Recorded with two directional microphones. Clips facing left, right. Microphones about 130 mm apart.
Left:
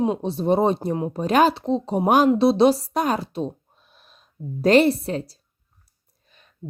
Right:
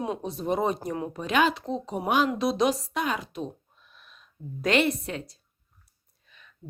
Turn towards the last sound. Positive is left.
turn(degrees=40)  # may be behind; listen again after turning